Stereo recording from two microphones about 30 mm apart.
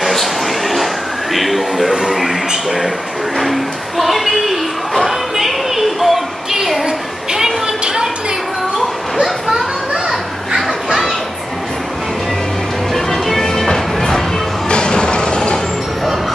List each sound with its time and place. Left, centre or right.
0.0 s a sound: centre
1.3 s speech: centre
1.9 s speech: right
2.1 s speech: centre
3.3 s a sound: centre
10.0 s children playing: centre
12.9 s music: centre
14.7 s music: left